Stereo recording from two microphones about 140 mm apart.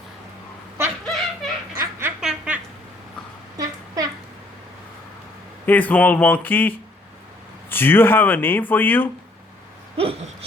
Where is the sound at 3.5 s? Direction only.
25° right (ahead or behind).